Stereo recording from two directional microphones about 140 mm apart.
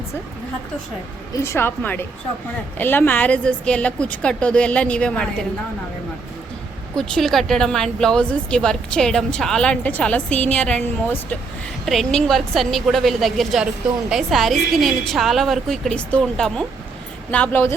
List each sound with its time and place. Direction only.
1.4 s a woman's voice: 15° left (ahead or behind)
6.9 s a woman's voice: 5° left (ahead or behind)